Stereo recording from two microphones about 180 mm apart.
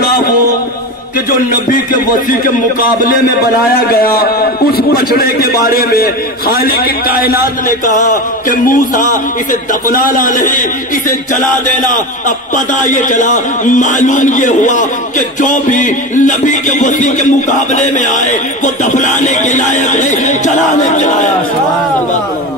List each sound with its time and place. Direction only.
1.3 s a man's voice: 50° left (ahead or behind)
3.9 s a man's voice: 55° left (ahead or behind)
7.8 s a man's voice: 45° left (ahead or behind)
12.5 s a man's voice: 45° left (ahead or behind)